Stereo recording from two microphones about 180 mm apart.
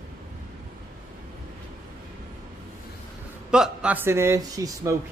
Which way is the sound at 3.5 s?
5° right (ahead or behind).